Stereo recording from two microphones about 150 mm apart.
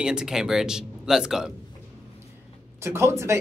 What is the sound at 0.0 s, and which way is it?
Speech, 5° right (ahead or behind).